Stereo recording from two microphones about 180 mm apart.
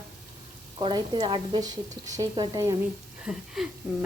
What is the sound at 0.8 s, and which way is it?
A woman's voice, 25° right (ahead or behind).